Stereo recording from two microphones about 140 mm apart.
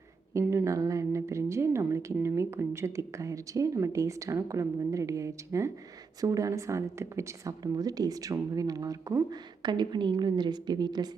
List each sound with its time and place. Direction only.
0.3 s a woman's voice: 20° right (ahead or behind)